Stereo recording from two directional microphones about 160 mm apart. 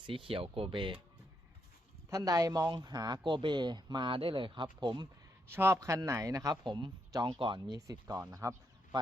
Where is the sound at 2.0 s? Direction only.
20° right (ahead or behind).